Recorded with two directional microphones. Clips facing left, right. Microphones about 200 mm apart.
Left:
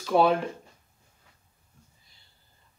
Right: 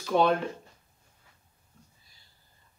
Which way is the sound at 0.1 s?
5° left (ahead or behind).